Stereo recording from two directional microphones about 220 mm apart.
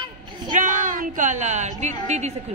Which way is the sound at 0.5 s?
35° right (ahead or behind).